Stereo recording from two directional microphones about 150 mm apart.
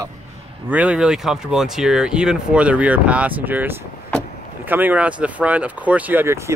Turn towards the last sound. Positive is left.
turn(degrees=-15)  # may be behind; listen again after turning